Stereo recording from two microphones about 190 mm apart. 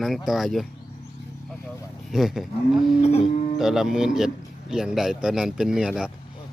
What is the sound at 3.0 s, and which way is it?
Cattle, 35° left (ahead or behind).